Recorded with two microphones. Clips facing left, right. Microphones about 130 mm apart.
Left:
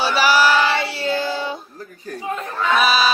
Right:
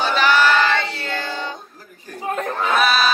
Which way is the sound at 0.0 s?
10° left (ahead or behind).